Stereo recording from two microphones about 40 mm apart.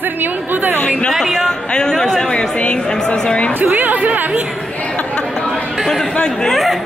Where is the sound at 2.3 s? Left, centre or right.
Left.